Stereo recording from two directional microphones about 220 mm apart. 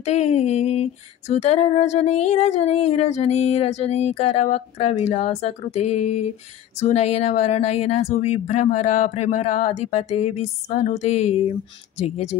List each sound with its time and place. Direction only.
0.0 s female singing: 30° left (ahead or behind)
6.8 s speech: 30° left (ahead or behind)
12.0 s female singing: 30° left (ahead or behind)